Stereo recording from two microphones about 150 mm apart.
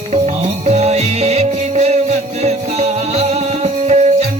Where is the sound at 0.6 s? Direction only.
45° right (ahead or behind).